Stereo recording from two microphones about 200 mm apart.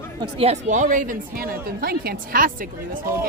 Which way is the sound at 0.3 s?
30° right (ahead or behind).